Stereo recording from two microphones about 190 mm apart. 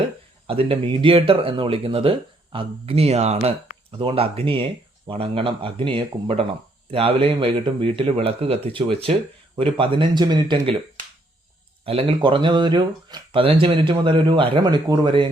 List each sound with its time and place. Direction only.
0.4 s speech: 30° right (ahead or behind)
11.9 s speech: 30° right (ahead or behind)